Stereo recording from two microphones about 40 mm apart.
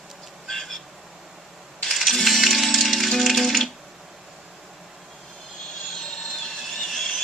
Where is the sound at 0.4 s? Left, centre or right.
Centre.